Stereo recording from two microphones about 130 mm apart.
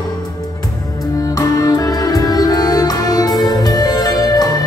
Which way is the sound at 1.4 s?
25° left (ahead or behind).